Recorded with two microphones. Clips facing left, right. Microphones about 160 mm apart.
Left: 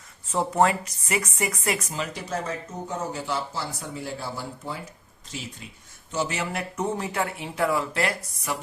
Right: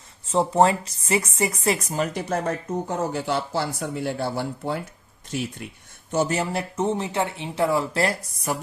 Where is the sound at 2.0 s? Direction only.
55° right (ahead or behind).